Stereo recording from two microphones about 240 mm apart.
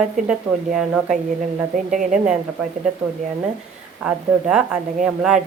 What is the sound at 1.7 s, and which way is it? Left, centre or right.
Speech, right.